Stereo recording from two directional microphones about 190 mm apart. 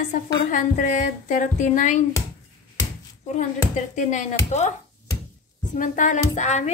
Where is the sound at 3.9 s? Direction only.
40° left (ahead or behind).